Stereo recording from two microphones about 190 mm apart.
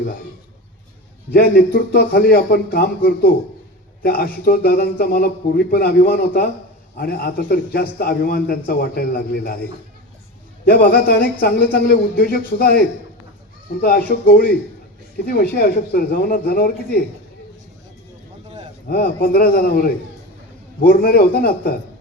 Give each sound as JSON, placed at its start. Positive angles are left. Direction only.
{"t": 1.3, "sound": "a man's voice", "side_deg": 55}
{"t": 10.7, "sound": "a man's voice", "side_deg": 50}
{"t": 13.8, "sound": "a man's voice", "side_deg": 50}
{"t": 18.9, "sound": "a man's voice", "side_deg": 55}